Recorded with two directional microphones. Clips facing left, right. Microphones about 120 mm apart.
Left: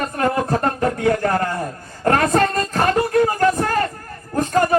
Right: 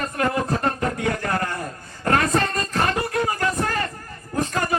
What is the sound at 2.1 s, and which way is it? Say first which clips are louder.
Music: left 4 dB; 40° left (ahead or behind).